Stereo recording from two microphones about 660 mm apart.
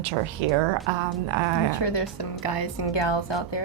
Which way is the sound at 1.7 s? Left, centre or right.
Left.